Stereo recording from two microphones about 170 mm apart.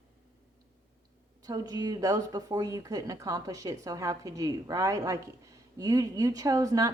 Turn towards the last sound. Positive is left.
turn(degrees=-20)  # may be behind; listen again after turning